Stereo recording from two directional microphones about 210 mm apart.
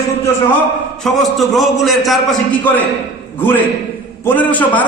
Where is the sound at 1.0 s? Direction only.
Centre (ahead or behind).